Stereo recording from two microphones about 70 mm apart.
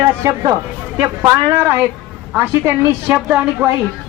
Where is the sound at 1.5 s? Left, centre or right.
Right.